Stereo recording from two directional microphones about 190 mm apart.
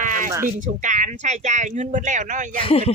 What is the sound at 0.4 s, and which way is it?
Speech, 40° right (ahead or behind).